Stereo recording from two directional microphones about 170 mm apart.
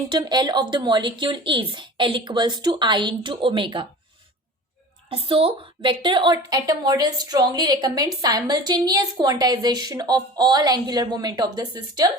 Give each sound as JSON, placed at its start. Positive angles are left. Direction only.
{"t": 0.1, "sound": "a woman's voice", "side_deg": -25}
{"t": 5.0, "sound": "a woman's voice", "side_deg": -35}